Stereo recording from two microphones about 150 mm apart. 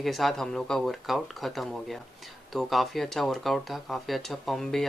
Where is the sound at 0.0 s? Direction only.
Centre (ahead or behind).